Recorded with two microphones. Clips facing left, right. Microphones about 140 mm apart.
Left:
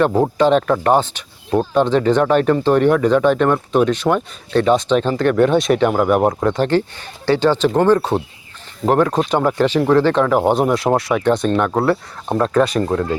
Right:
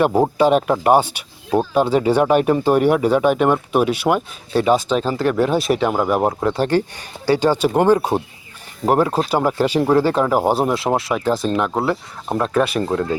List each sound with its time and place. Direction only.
0.0 s speech: 10° right (ahead or behind)